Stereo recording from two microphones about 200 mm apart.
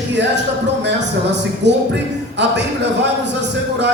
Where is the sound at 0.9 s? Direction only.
60° right (ahead or behind).